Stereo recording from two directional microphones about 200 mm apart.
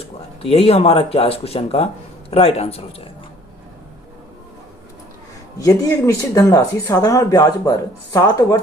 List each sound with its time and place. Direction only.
0.4 s speech: 30° left (ahead or behind)
5.5 s speech: 15° left (ahead or behind)